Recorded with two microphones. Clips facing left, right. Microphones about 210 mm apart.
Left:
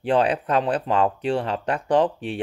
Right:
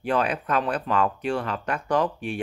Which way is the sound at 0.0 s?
30° left (ahead or behind).